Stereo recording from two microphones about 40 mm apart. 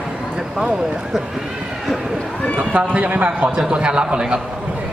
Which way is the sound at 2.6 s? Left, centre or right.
Right.